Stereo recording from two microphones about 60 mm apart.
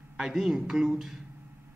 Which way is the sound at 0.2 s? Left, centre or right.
Centre.